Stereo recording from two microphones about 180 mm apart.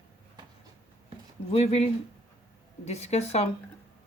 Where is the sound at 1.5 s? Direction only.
35° left (ahead or behind).